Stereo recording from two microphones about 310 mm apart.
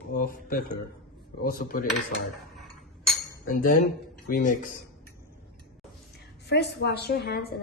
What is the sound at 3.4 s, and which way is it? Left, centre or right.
Speech, left.